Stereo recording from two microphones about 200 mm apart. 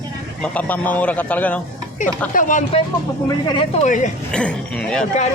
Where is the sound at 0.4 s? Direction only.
5° left (ahead or behind).